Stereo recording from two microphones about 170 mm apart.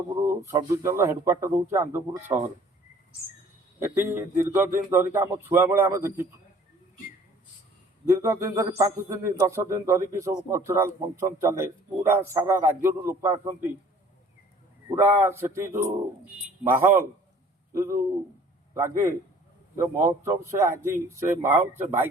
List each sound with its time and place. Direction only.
0.3 s a man's voice: 15° right (ahead or behind)
3.8 s a man's voice: 15° right (ahead or behind)
8.1 s a man's voice: 15° right (ahead or behind)
15.0 s a man's voice: 15° right (ahead or behind)
18.7 s a man's voice: 15° right (ahead or behind)